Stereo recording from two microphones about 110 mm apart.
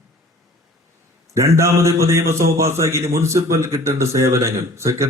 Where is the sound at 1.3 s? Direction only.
25° right (ahead or behind).